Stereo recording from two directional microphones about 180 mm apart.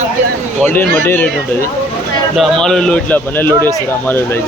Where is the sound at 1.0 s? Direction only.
10° left (ahead or behind).